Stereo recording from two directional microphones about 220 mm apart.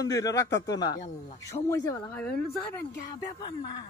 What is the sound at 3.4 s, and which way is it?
Speech, 20° left (ahead or behind).